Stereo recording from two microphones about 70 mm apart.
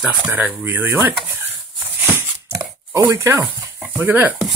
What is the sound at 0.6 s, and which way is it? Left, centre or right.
Speech, right.